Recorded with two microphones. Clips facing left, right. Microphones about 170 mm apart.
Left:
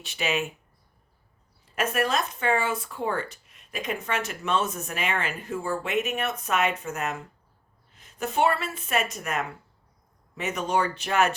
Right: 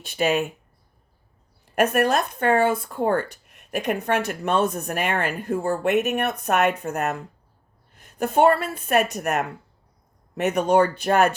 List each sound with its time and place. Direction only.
0.0 s speech: 50° right (ahead or behind)
1.6 s speech: 65° right (ahead or behind)